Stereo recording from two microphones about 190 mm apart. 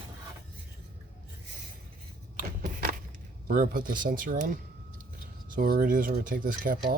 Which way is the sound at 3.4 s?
50° right (ahead or behind).